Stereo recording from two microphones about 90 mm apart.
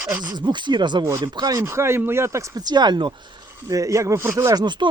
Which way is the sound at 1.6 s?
30° right (ahead or behind).